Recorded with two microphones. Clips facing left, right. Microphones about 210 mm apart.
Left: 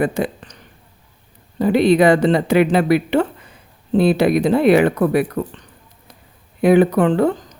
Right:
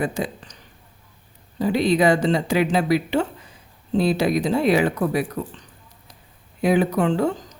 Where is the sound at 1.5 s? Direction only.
60° left (ahead or behind).